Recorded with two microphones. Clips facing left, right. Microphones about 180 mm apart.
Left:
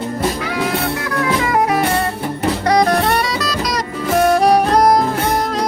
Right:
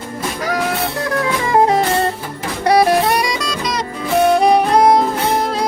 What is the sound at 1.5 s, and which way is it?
Music, 30° right (ahead or behind).